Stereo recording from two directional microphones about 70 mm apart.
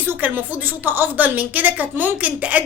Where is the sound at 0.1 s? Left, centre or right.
Right.